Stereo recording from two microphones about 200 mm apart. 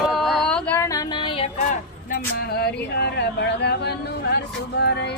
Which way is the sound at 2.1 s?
55° left (ahead or behind).